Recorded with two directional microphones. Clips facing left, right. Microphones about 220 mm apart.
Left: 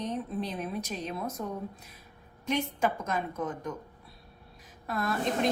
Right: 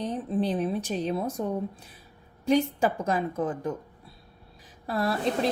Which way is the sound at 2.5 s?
30° right (ahead or behind).